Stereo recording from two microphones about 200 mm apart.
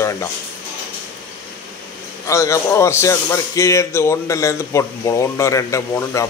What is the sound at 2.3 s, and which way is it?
Speech, 15° left (ahead or behind).